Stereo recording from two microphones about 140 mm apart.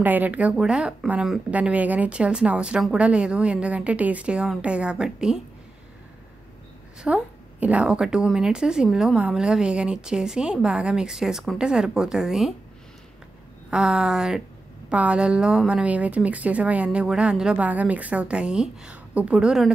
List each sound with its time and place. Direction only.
0.0 s speech: 10° right (ahead or behind)
7.0 s a woman's voice: 10° right (ahead or behind)
13.7 s a woman's voice: 5° right (ahead or behind)